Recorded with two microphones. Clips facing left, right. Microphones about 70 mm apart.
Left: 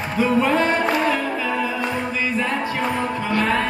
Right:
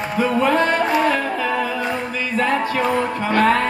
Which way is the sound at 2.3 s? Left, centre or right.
Right.